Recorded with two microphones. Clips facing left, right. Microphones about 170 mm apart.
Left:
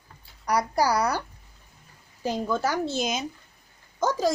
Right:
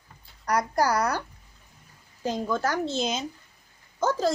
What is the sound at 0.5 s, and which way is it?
Speech, 10° left (ahead or behind).